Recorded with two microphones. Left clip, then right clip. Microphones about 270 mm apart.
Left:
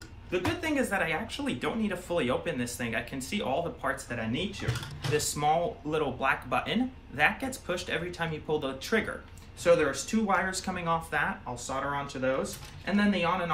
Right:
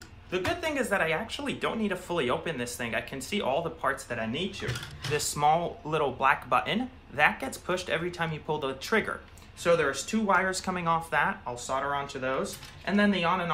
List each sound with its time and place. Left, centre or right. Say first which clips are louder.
0.3 s speech: right 1 dB; centre